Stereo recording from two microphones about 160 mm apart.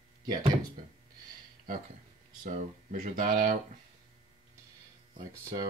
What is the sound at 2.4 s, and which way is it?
Speech, 55° right (ahead or behind).